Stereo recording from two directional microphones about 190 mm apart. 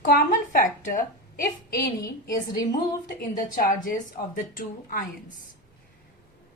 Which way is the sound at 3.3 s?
45° left (ahead or behind).